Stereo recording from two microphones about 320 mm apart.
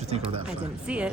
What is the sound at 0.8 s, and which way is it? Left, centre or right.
Speech, centre.